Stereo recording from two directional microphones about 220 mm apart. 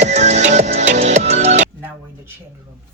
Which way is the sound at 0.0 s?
30° right (ahead or behind).